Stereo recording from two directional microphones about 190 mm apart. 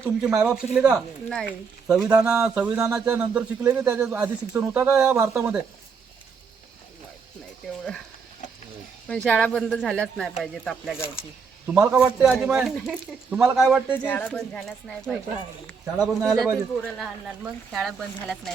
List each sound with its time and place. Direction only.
0.0 s a man's voice: 5° right (ahead or behind)
7.6 s a man's voice: centre (ahead or behind)
9.0 s a man's voice: 5° left (ahead or behind)
11.6 s a man's voice: 10° right (ahead or behind)
14.0 s a man's voice: 5° left (ahead or behind)
16.0 s a man's voice: 20° right (ahead or behind)
16.7 s a man's voice: centre (ahead or behind)